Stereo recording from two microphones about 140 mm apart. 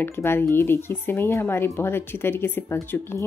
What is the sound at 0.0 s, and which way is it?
Speech, 15° left (ahead or behind).